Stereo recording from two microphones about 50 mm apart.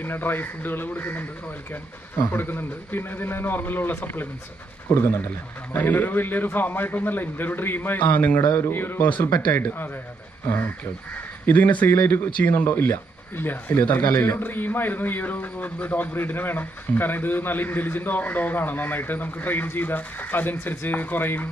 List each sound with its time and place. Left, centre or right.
0.0 s a man's voice: left
5.8 s a man's voice: left
8.0 s a man's voice: left
11.4 s a man's voice: left
12.6 s a man's voice: left
12.9 s a man's voice: left